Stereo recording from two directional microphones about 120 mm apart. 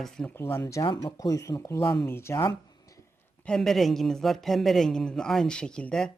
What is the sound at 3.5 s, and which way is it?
Speech, 5° left (ahead or behind).